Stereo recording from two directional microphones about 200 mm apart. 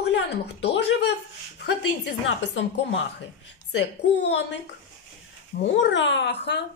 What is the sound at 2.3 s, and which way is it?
Speech, 65° left (ahead or behind).